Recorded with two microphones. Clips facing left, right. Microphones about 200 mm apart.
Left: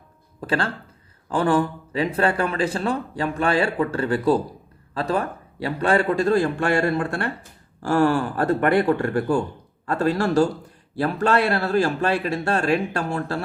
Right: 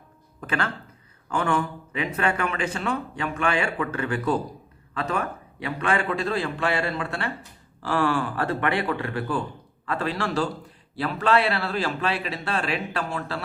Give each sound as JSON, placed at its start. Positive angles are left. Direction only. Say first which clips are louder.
{"t": 0.4, "sound": "speech", "louder": "left 4 dB", "side_deg": 30}